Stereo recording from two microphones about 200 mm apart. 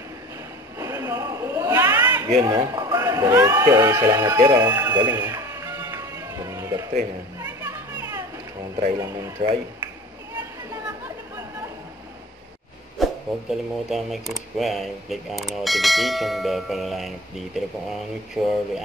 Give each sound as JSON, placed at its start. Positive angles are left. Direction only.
{"t": 0.7, "sound": "a sound", "side_deg": -15}
{"t": 2.4, "sound": "speech", "side_deg": -15}
{"t": 4.4, "sound": "music", "side_deg": -20}
{"t": 7.3, "sound": "children playing", "side_deg": -15}
{"t": 8.9, "sound": "speech", "side_deg": -15}
{"t": 13.0, "sound": "speech", "side_deg": 0}